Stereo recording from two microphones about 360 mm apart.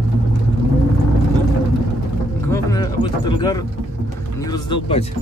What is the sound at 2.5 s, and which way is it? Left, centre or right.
Speech, centre.